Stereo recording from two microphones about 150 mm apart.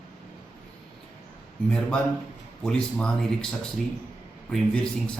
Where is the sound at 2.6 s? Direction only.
5° left (ahead or behind).